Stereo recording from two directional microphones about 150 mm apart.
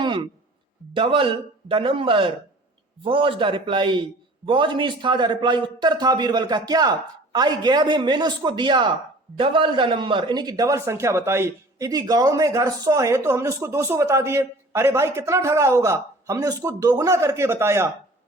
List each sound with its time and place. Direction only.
0.9 s a man's voice: 35° right (ahead or behind); by 17.8 s 15° right (ahead or behind)